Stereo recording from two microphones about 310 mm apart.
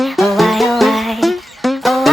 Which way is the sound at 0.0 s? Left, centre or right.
Centre.